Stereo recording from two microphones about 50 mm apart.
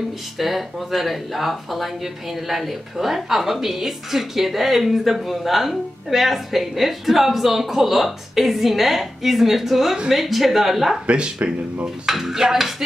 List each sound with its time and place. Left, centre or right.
0.4 s speech: centre
11.1 s speech: right
12.1 s dishes: centre